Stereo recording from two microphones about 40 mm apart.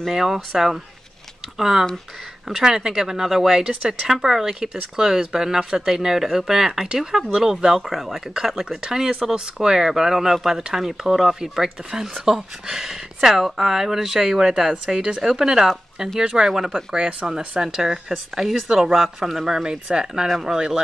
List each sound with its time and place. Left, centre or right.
0.0 s speech: centre
9.2 s speech: centre
16.9 s speech: right
17.6 s speech: centre